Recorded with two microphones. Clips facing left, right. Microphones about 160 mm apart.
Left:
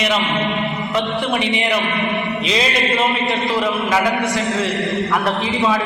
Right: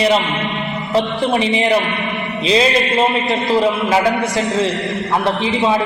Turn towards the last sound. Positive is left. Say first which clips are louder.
# right 2 dB
turn(degrees=-25)  # may be behind; listen again after turning